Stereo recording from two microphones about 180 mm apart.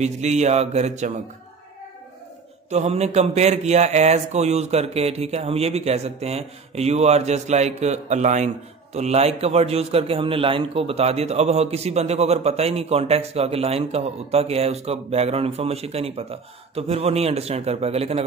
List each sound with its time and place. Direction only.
0.0 s a man's voice: 40° right (ahead or behind)
2.7 s a man's voice: 35° right (ahead or behind)